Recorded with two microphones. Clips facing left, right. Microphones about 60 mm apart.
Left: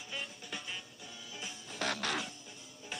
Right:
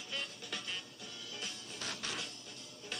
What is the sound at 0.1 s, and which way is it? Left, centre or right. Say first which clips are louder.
Music: even; centre.